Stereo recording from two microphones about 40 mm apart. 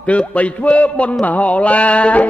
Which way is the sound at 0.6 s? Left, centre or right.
Left.